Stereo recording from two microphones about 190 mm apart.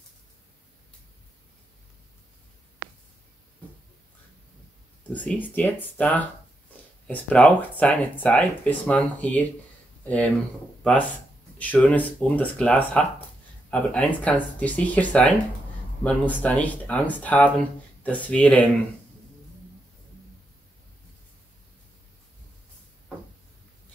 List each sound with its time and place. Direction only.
5.1 s speech: 10° left (ahead or behind)